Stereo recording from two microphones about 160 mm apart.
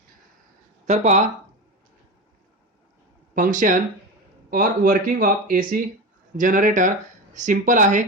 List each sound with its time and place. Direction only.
0.9 s speech: 45° right (ahead or behind)
3.3 s speech: 55° right (ahead or behind)